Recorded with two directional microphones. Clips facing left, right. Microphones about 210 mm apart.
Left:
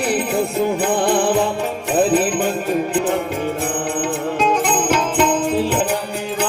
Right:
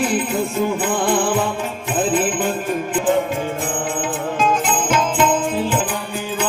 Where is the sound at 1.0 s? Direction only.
65° left (ahead or behind).